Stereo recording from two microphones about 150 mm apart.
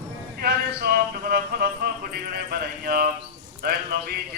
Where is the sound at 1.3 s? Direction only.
85° right.